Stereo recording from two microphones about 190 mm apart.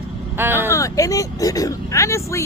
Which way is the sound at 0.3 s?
10° right (ahead or behind).